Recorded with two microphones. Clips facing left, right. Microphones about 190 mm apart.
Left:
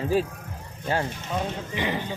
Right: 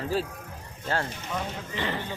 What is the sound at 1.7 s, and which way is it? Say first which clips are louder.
Speech: left 2 dB; 15° left (ahead or behind).